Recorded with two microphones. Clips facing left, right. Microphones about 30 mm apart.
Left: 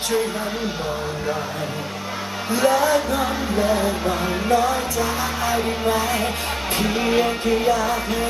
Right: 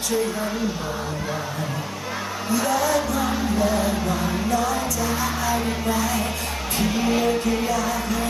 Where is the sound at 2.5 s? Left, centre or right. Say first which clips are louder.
Left 4 dB; left.